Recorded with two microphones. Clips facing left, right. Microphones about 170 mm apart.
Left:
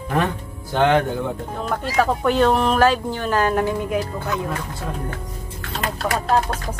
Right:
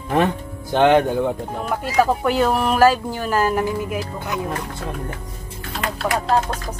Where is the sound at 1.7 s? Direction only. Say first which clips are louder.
Right 2 dB; 10° right (ahead or behind).